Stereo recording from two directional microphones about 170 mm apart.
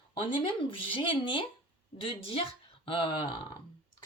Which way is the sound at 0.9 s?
30° left (ahead or behind).